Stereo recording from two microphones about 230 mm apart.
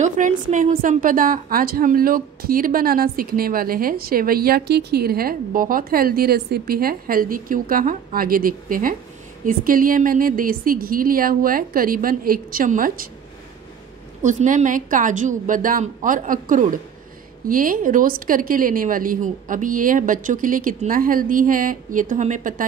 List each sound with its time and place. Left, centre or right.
0.0 s a woman's voice: right
14.2 s a woman's voice: right